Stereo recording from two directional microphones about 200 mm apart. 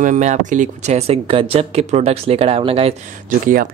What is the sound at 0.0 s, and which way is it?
Speech, 40° right (ahead or behind).